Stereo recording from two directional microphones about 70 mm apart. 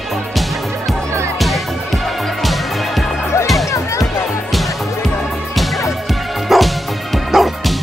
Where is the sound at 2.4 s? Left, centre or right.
Centre.